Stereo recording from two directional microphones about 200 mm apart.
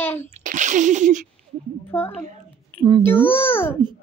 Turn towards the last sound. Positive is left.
turn(degrees=10)  # may be behind; listen again after turning